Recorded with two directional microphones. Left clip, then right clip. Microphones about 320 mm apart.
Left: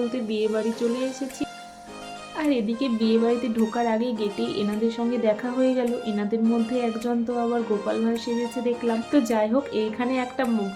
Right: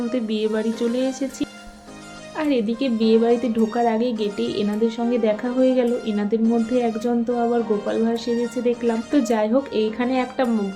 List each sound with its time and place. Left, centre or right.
0.1 s a woman's voice: centre